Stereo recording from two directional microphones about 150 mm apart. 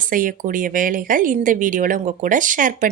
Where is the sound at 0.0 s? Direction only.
65° right (ahead or behind).